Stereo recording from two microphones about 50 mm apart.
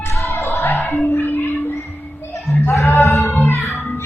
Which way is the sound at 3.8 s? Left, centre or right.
Left.